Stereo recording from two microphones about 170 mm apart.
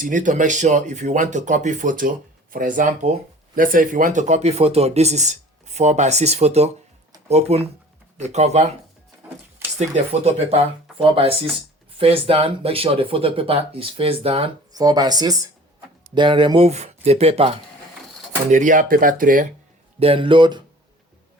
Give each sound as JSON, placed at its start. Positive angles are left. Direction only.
{"t": 0.0, "sound": "speech", "side_deg": -50}
{"t": 9.7, "sound": "speech", "side_deg": -40}
{"t": 14.7, "sound": "speech", "side_deg": -20}
{"t": 18.5, "sound": "speech", "side_deg": -50}
{"t": 20.0, "sound": "speech", "side_deg": -35}